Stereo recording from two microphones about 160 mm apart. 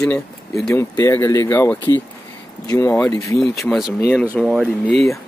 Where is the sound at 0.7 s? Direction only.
20° left (ahead or behind).